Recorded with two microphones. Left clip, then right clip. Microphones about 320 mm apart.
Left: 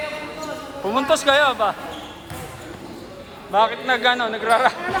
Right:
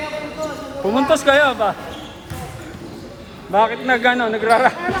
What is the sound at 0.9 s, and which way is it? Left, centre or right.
Speech, centre.